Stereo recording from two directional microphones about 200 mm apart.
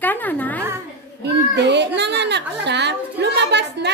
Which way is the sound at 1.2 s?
60° right (ahead or behind).